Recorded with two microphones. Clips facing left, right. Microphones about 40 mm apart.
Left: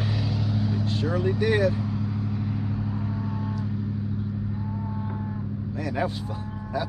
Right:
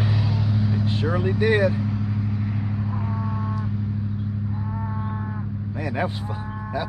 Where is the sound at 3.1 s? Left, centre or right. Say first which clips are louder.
Right 2 dB; centre.